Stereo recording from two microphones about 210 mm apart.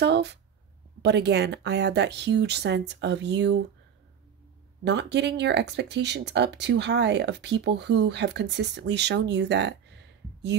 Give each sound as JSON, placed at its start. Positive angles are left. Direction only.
{"t": 0.0, "sound": "speech", "side_deg": -55}
{"t": 4.8, "sound": "speech", "side_deg": -55}